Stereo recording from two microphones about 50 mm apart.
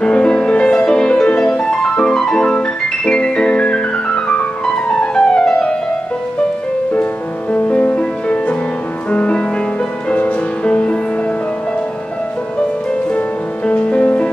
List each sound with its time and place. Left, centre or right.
0.0 s music: left
7.5 s music: left
13.7 s music: left